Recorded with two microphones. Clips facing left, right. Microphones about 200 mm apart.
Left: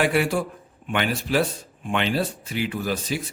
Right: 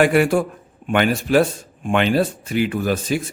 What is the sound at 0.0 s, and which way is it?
Speech, 50° right (ahead or behind).